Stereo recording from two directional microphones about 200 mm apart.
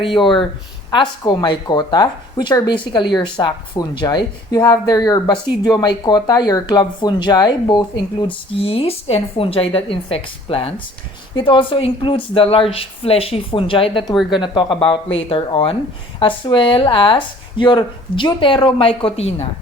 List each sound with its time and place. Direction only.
0.9 s speech: 20° left (ahead or behind)